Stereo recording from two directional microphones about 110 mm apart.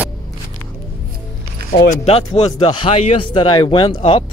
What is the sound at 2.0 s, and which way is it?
Speech, 60° left (ahead or behind).